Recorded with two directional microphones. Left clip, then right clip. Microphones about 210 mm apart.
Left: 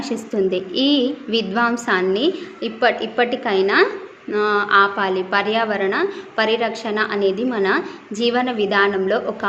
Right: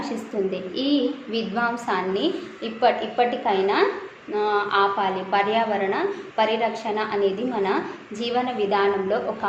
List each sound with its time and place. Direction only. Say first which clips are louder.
0.5 s a woman's voice: left 6 dB; 55° left (ahead or behind)